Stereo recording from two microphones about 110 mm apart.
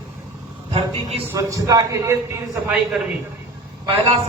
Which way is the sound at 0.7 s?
65° right (ahead or behind).